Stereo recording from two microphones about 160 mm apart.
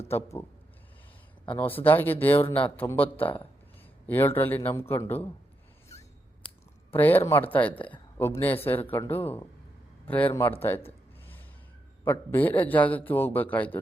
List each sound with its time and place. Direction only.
0.1 s a man's voice: 15° left (ahead or behind)
1.8 s a man's voice: 10° left (ahead or behind)
5.9 s a sound: 45° left (ahead or behind)
6.9 s a man's voice: 10° left (ahead or behind)
12.3 s a man's voice: 10° left (ahead or behind)